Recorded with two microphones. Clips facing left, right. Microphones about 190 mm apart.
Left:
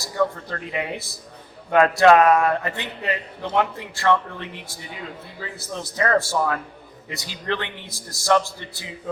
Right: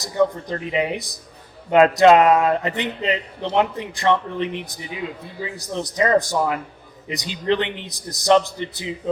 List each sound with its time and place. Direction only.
0.0 s a man's voice: 20° right (ahead or behind)